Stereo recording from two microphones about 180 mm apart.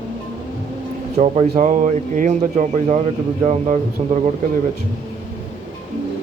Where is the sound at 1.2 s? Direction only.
35° right (ahead or behind).